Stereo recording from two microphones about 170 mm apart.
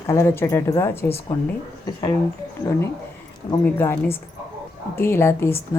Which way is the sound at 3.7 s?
15° left (ahead or behind).